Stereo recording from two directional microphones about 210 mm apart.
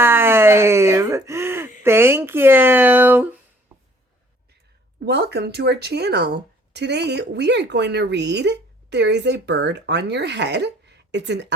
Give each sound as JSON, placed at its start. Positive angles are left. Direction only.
{"t": 0.0, "sound": "speech", "side_deg": -10}
{"t": 4.9, "sound": "speech", "side_deg": -50}